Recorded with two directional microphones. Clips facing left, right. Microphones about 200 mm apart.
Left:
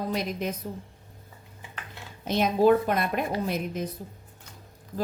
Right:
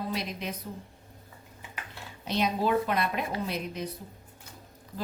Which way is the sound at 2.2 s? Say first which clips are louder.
Left 6 dB; 50° left (ahead or behind).